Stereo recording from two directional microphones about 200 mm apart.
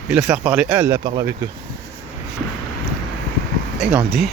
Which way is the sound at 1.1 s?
25° right (ahead or behind).